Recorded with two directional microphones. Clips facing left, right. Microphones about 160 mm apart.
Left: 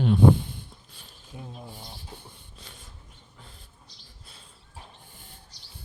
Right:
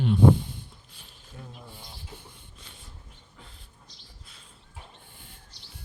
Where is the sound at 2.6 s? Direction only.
35° left (ahead or behind).